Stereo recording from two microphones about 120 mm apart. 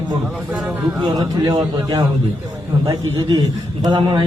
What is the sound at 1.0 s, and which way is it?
Speech, 30° right (ahead or behind).